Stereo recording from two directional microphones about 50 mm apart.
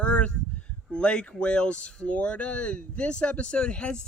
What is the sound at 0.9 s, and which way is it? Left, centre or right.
Speech, centre.